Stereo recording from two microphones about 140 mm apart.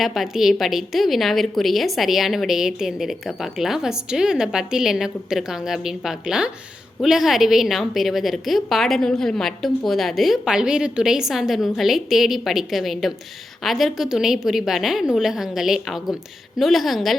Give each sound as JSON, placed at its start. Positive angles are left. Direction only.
{"t": 0.0, "sound": "a woman's voice", "side_deg": 0}